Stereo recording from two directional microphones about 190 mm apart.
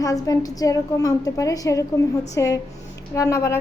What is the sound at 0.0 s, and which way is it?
A woman's voice, 20° left (ahead or behind).